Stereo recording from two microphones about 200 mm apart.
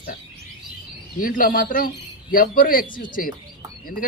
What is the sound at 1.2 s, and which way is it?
A man's voice, 45° left (ahead or behind).